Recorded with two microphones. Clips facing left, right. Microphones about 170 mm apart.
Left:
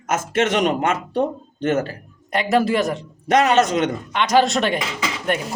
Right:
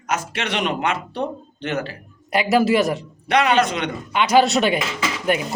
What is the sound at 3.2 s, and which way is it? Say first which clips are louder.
Speech: left 2 dB; 40° left (ahead or behind).